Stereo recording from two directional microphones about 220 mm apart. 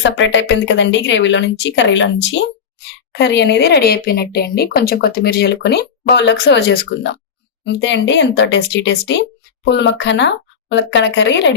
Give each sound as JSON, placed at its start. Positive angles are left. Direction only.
{"t": 0.0, "sound": "speech", "side_deg": 55}